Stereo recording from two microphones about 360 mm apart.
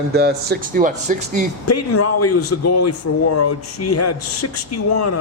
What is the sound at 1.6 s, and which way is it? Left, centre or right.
A man's voice, left.